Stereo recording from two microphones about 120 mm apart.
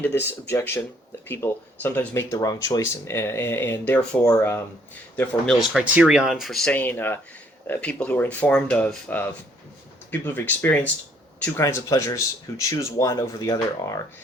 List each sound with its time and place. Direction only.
0.0 s speech: 15° left (ahead or behind)
5.9 s speech: 10° right (ahead or behind)
6.7 s speech: 15° left (ahead or behind)
11.6 s speech: 25° left (ahead or behind)